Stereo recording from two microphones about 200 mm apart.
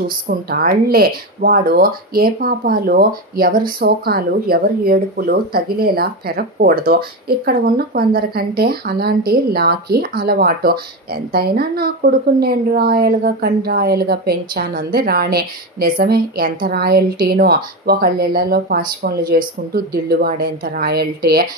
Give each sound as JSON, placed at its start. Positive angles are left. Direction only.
{"t": 0.0, "sound": "speech", "side_deg": -50}